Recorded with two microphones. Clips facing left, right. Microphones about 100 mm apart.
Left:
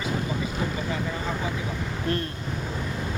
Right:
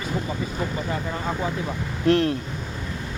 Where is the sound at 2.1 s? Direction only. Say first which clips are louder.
Right 10 dB; 85° right.